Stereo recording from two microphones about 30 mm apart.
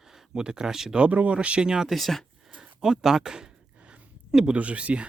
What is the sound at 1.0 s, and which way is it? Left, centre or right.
Speech, right.